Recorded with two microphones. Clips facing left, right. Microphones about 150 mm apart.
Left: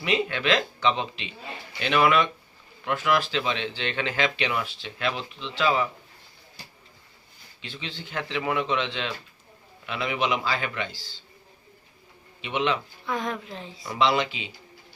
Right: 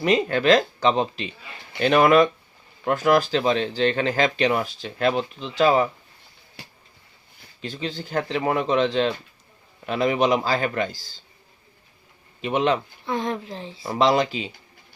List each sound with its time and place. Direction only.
0.0 s speech: 40° right (ahead or behind)
7.6 s speech: 40° right (ahead or behind)
12.4 s speech: 40° right (ahead or behind)
13.1 s a woman's voice: 25° right (ahead or behind)